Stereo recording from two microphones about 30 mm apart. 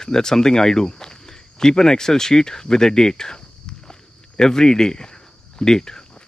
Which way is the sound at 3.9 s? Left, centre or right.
Left.